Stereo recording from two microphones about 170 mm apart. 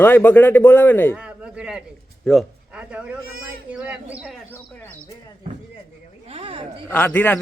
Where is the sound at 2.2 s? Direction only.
5° right (ahead or behind).